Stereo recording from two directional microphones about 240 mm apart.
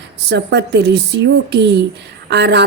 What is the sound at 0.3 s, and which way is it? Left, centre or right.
Speech, right.